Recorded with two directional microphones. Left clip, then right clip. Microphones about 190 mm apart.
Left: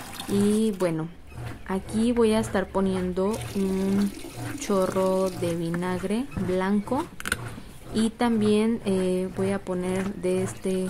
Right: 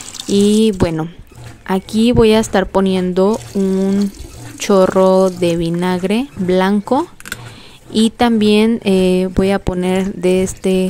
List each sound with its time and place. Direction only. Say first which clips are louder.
0.3 s speech: right 12 dB; 50° right (ahead or behind)